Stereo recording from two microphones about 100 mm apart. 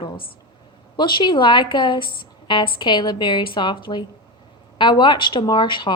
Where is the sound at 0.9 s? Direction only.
50° left (ahead or behind).